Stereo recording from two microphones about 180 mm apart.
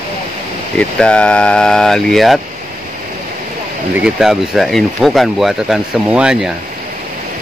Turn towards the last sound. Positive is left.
turn(degrees=-5)  # may be behind; listen again after turning